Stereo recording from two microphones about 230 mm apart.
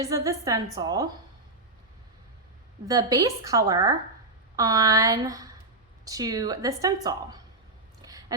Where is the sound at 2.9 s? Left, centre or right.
Centre.